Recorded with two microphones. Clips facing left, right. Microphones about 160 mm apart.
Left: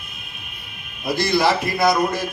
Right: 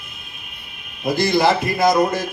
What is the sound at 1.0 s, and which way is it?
Speech, 45° right (ahead or behind).